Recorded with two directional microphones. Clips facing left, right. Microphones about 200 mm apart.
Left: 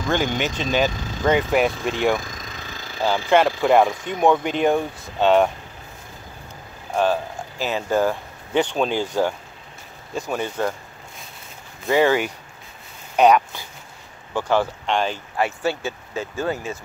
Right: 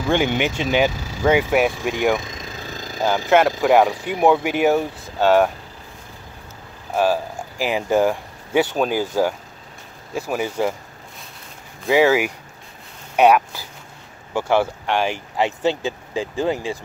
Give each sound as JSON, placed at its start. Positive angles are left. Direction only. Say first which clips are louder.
{"t": 0.0, "sound": "speech", "louder": "right 3 dB", "side_deg": -10}
{"t": 2.1, "sound": "vehicle", "louder": "right 2 dB", "side_deg": -25}
{"t": 3.3, "sound": "speech", "louder": "right 1 dB", "side_deg": -5}
{"t": 6.9, "sound": "speech", "louder": "right 1 dB", "side_deg": -5}
{"t": 10.1, "sound": "speech", "louder": "right 2 dB", "side_deg": -5}
{"t": 11.8, "sound": "speech", "louder": "right 2 dB", "side_deg": -5}